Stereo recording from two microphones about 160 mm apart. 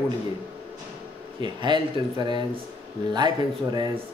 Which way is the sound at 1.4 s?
30° right (ahead or behind).